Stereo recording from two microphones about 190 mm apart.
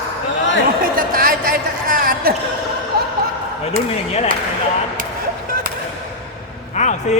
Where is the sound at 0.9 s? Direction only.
50° right (ahead or behind).